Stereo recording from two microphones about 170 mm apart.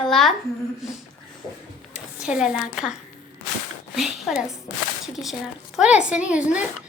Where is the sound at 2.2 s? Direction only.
5° right (ahead or behind).